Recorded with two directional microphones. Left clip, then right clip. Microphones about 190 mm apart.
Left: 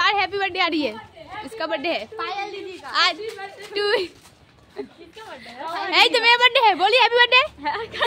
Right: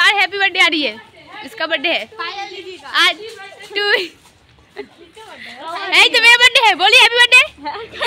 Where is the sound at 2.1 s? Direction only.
65° left (ahead or behind).